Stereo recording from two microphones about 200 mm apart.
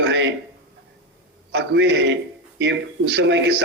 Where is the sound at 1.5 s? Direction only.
60° right (ahead or behind).